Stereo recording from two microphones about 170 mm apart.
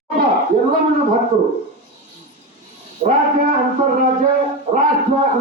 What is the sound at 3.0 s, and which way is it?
Speech, 35° right (ahead or behind).